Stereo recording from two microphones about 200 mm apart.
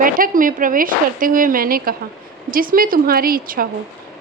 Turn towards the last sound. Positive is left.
turn(degrees=-45)  # may be behind; listen again after turning